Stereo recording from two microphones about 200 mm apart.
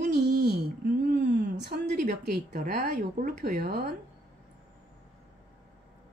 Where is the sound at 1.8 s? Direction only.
40° right (ahead or behind).